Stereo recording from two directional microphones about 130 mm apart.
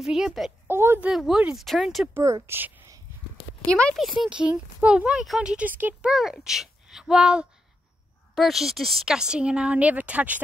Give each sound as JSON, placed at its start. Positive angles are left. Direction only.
{"t": 0.0, "sound": "speech", "side_deg": -5}
{"t": 0.7, "sound": "speech", "side_deg": -20}
{"t": 1.1, "sound": "speech", "side_deg": 0}
{"t": 2.1, "sound": "a woman's voice", "side_deg": -20}
{"t": 3.6, "sound": "speech", "side_deg": 5}
{"t": 6.1, "sound": "speech", "side_deg": 0}